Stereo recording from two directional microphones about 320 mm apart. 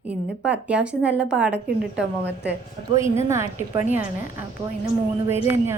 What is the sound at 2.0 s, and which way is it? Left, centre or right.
Speech, right.